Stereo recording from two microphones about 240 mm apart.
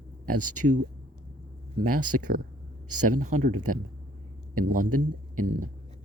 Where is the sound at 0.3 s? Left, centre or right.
Right.